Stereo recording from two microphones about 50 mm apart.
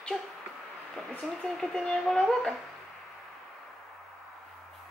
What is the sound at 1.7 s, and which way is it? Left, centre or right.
Speech, centre.